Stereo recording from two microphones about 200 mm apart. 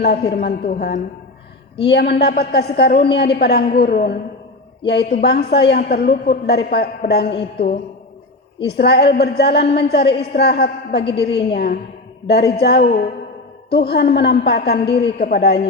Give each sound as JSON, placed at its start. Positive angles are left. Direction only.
{"t": 0.0, "sound": "a woman's voice", "side_deg": 55}
{"t": 8.6, "sound": "a woman's voice", "side_deg": 55}